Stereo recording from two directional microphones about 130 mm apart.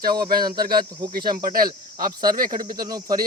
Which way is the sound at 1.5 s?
90° right.